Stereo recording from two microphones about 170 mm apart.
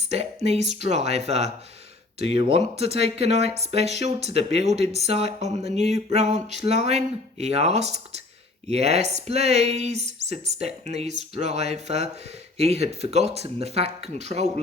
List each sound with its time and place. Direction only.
0.4 s speech: 40° right (ahead or behind)